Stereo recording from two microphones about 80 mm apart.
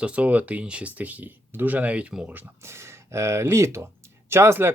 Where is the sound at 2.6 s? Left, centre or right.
Right.